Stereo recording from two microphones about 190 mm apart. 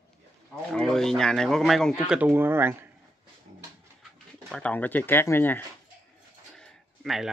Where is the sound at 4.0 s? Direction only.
Centre (ahead or behind).